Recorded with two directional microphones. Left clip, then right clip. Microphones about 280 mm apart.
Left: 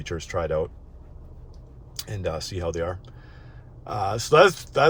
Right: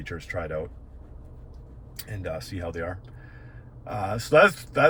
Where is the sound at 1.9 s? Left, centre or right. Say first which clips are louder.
Left 4 dB; left.